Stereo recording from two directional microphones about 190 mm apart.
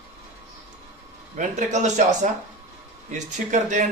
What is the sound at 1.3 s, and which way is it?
Speech, 40° right (ahead or behind).